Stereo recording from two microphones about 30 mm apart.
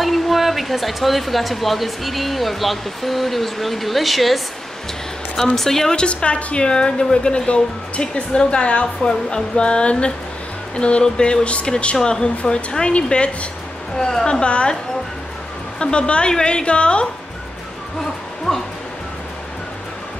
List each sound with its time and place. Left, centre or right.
0.0 s speech: centre
5.6 s a woman's voice: centre
5.9 s a woman's voice: left
8.8 s a woman's voice: left
12.9 s a woman's voice: left
13.9 s a woman's voice: centre
14.2 s a woman's voice: left
15.8 s a woman's voice: left
18.5 s music: centre